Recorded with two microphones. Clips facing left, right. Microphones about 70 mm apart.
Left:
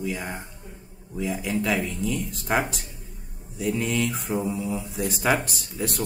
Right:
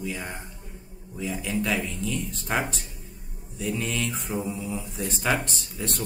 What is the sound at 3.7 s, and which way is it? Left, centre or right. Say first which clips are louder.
Speech: left 4 dB; centre.